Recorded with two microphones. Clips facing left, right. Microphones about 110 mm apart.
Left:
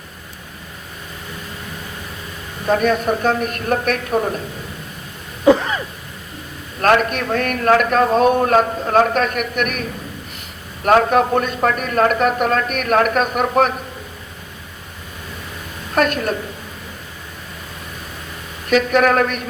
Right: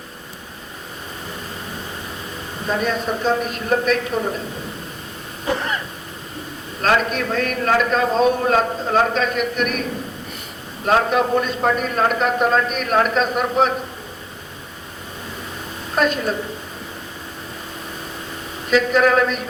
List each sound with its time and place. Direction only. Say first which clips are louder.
2.6 s a man's voice: left 5 dB; 60° left (ahead or behind)
6.8 s a man's voice: left 3 dB; 55° left (ahead or behind)
10.8 s a man's voice: left 3 dB; 60° left (ahead or behind)
18.7 s a man's voice: left 1 dB; 60° left (ahead or behind)